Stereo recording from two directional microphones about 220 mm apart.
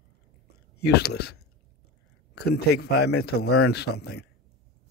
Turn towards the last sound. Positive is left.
turn(degrees=50)  # may be behind; listen again after turning